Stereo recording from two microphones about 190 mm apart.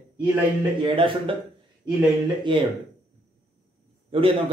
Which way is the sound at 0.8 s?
30° right (ahead or behind).